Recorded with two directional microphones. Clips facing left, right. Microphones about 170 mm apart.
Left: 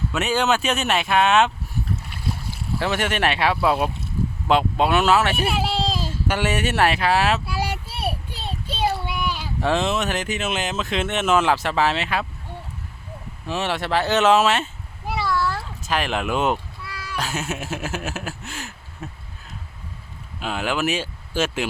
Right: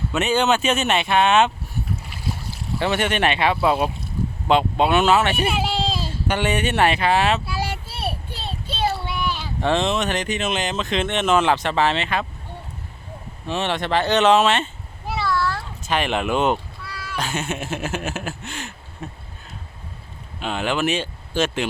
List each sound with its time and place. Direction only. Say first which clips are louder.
0.1 s speech: right 2 dB; centre (ahead or behind)
2.7 s speech: right 2 dB; centre (ahead or behind)
5.9 s a sound: even; 40° left (ahead or behind)
6.2 s a child's voice: right 1 dB; 5° left (ahead or behind)
13.5 s speech: right 1 dB; 5° left (ahead or behind)
15.1 s a sound: even; 10° left (ahead or behind)
15.8 s speech: right 2 dB; centre (ahead or behind)
20.4 s speech: right 1 dB; 5° left (ahead or behind)